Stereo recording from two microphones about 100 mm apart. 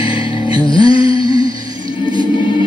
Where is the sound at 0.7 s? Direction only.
45° right (ahead or behind).